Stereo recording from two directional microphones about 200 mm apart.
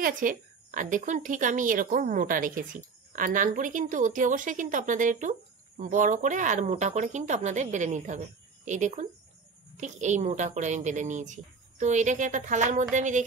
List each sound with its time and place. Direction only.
0.0 s a woman's voice: 40° right (ahead or behind)